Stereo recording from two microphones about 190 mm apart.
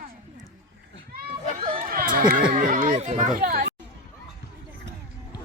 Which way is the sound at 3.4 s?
55° right (ahead or behind).